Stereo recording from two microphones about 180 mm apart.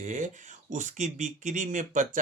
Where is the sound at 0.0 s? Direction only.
40° right (ahead or behind).